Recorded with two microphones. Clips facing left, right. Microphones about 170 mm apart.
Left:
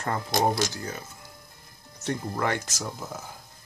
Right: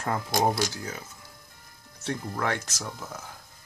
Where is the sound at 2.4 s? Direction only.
Centre (ahead or behind).